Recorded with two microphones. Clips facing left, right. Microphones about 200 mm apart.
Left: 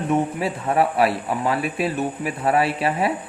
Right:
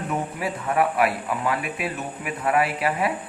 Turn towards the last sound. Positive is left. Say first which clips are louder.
# left 3 dB
turn(degrees=30)  # may be behind; listen again after turning